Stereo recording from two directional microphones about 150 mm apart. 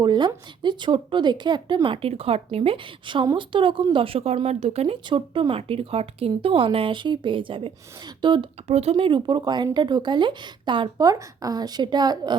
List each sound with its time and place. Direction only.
0.0 s speech: 30° right (ahead or behind)
8.6 s speech: 45° right (ahead or behind); by 12.4 s 25° right (ahead or behind)